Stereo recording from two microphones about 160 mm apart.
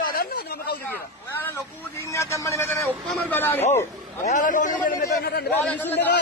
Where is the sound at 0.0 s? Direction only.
65° left (ahead or behind).